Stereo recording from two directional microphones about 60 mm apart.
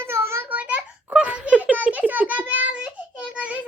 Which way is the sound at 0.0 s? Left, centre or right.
Right.